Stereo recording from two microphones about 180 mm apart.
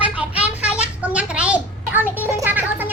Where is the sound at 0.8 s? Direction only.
10° right (ahead or behind).